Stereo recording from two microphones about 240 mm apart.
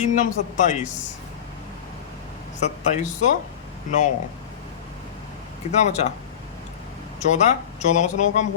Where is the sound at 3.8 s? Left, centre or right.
Left.